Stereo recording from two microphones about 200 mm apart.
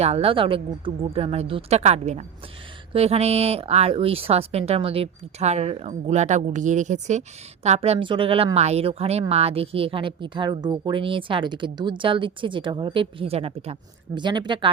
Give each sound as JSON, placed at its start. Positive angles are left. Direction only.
{"t": 0.0, "sound": "speech", "side_deg": -30}